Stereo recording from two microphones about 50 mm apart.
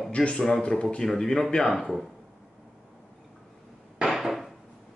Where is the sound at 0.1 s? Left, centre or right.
Left.